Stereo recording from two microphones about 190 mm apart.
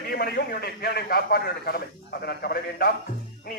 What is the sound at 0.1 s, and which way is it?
A man's voice, 55° left (ahead or behind).